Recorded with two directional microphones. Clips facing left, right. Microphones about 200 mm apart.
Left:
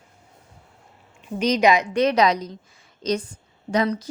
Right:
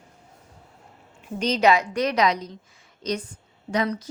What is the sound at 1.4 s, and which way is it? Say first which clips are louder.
A woman's voice: left 2 dB; 10° left (ahead or behind).